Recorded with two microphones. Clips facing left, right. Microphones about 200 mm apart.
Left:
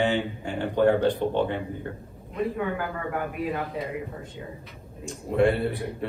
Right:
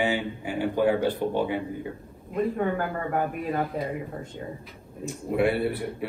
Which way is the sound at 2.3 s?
45° right (ahead or behind).